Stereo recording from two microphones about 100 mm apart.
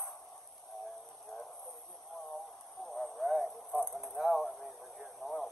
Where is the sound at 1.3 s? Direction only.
5° left (ahead or behind).